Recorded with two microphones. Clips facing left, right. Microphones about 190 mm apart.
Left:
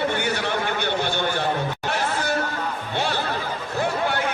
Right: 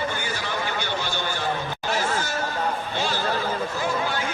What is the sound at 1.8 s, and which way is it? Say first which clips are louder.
Chatter: right 1 dB; 60° left (ahead or behind).